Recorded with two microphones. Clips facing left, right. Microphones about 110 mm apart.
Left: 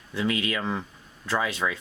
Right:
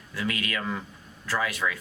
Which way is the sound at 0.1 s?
25° left (ahead or behind).